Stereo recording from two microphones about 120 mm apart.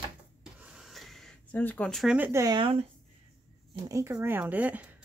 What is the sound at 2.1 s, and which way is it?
Speech, 15° right (ahead or behind).